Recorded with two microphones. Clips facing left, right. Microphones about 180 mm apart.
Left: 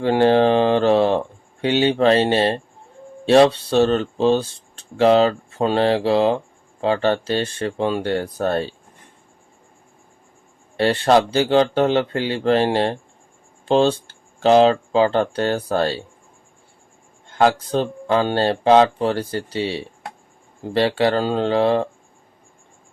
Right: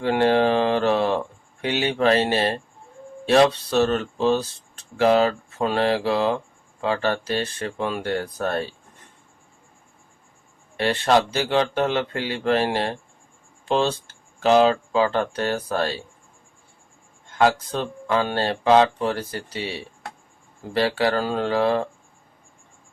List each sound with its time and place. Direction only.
0.0 s mantra: 30° left (ahead or behind)
1.6 s speech: 30° left (ahead or behind)
10.8 s speech: 30° left (ahead or behind)
17.3 s speech: 30° left (ahead or behind)